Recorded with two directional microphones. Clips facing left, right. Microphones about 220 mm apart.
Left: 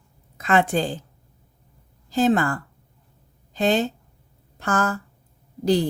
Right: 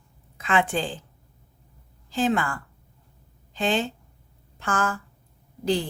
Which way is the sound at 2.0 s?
40° left (ahead or behind).